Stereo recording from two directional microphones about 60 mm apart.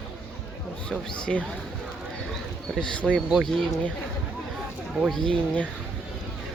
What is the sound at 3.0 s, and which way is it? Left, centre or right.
Speech, centre.